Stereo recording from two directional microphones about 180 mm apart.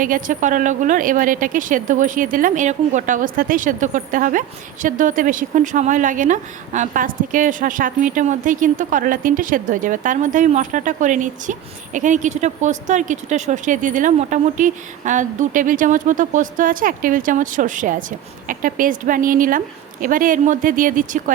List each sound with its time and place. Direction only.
0.0 s speech: 50° right (ahead or behind)